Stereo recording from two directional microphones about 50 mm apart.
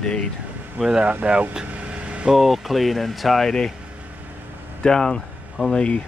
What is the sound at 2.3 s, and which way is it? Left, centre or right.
Speech, centre.